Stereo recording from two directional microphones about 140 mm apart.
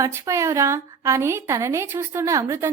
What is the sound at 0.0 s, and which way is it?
A woman's voice, 20° right (ahead or behind).